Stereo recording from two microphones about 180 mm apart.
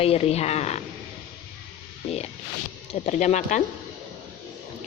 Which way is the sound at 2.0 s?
35° left (ahead or behind).